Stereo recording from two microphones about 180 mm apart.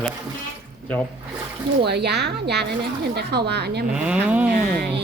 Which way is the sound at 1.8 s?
65° right (ahead or behind).